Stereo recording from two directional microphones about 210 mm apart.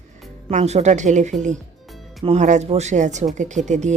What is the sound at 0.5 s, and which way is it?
A woman's voice, 30° right (ahead or behind).